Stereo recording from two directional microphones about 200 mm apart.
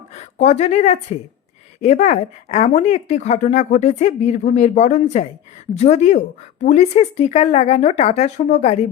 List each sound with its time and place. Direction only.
0.2 s speech: 35° left (ahead or behind)